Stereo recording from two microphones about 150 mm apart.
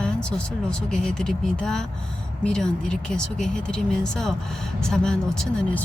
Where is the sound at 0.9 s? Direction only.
5° left (ahead or behind).